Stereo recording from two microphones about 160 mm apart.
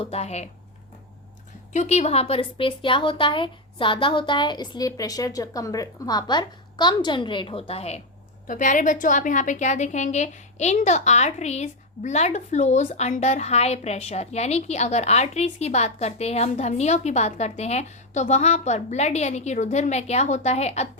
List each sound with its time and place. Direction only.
0.0 s a woman's voice: 40° left (ahead or behind)
1.7 s a woman's voice: 45° left (ahead or behind)
8.4 s a woman's voice: 50° left (ahead or behind)